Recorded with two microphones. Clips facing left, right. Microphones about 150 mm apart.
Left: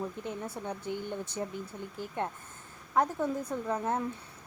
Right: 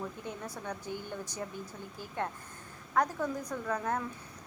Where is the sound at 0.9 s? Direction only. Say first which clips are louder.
Left 4 dB; 20° left (ahead or behind).